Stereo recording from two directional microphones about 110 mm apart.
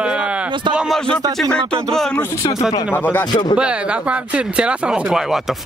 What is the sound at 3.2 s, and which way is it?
Speech, 40° left (ahead or behind).